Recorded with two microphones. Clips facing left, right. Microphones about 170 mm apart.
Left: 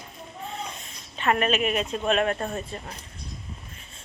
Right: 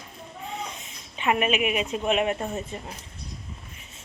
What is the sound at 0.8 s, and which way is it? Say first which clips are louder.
A woman's voice: left 1 dB; 10° right (ahead or behind).